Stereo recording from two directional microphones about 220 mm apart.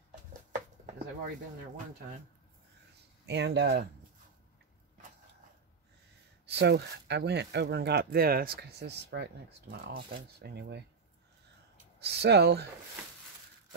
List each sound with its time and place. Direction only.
3.3 s speech: 50° right (ahead or behind)
6.4 s speech: 50° right (ahead or behind)
12.0 s speech: 50° right (ahead or behind)